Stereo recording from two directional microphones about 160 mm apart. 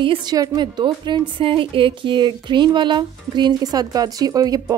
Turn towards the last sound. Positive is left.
turn(degrees=-25)  # may be behind; listen again after turning